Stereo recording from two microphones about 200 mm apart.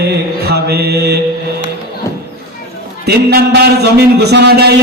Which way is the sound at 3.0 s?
50° right (ahead or behind).